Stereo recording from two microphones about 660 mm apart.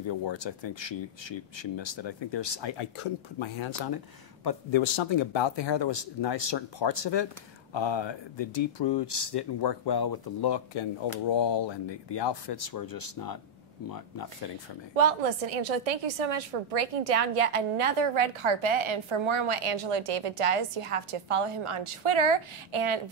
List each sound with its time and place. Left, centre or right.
0.0 s speech: left
15.0 s a woman's voice: right